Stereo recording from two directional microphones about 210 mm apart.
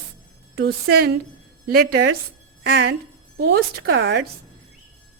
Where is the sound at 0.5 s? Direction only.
50° right (ahead or behind).